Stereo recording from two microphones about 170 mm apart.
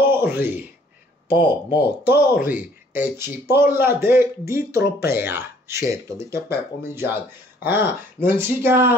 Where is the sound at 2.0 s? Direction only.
10° right (ahead or behind).